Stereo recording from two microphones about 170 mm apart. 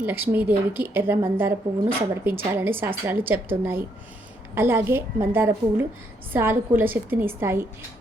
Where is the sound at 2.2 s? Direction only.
10° right (ahead or behind).